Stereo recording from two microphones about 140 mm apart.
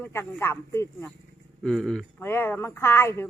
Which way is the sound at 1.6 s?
5° left (ahead or behind).